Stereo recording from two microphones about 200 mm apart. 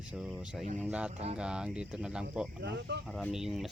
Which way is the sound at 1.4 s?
5° right (ahead or behind).